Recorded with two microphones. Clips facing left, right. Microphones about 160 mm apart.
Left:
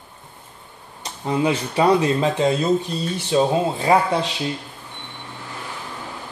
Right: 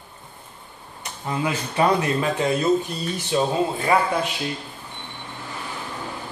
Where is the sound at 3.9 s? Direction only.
25° left (ahead or behind).